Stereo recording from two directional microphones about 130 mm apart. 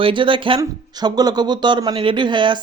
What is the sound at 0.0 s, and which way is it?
A man's voice, 40° right (ahead or behind).